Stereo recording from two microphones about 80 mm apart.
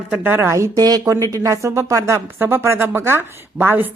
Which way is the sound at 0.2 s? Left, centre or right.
Right.